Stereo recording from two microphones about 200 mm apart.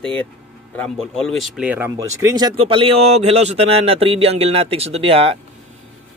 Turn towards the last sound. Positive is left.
turn(degrees=-30)  # may be behind; listen again after turning